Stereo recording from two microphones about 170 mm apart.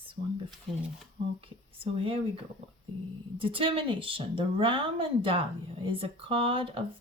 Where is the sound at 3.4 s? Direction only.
30° right (ahead or behind).